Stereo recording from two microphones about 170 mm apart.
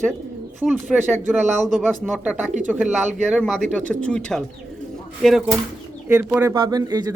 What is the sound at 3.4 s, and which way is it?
Speech, 5° left (ahead or behind).